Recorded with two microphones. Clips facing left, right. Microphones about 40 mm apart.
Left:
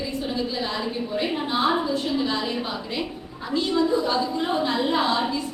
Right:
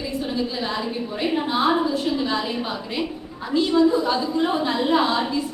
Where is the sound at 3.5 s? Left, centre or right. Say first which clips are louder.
Right 4 dB; centre.